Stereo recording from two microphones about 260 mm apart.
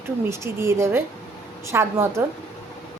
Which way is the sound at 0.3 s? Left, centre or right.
Centre.